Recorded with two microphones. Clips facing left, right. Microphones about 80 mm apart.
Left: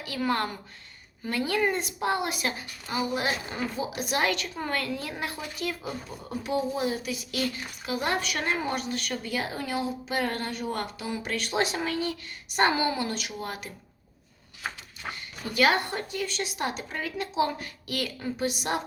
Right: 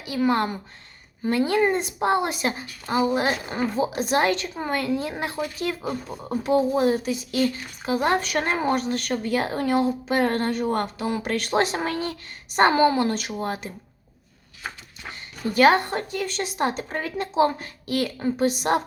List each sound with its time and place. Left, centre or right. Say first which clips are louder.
0.0 s a woman's voice: right 6 dB; centre; by 3.3 s right
3.5 s speech: right 7 dB; right
3.9 s a woman's voice: right 3 dB; right
4.5 s a woman's voice: right 5 dB; centre
15.5 s a woman's voice: right 6 dB; right